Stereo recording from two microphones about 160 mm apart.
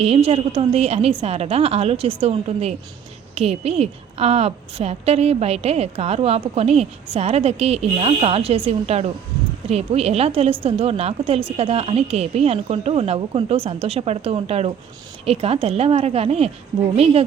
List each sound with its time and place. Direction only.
0.0 s a woman's voice: 40° right (ahead or behind)